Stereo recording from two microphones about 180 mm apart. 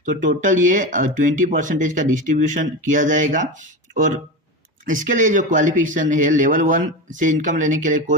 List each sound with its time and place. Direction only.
0.0 s speech: 45° right (ahead or behind)
4.9 s speech: 45° right (ahead or behind)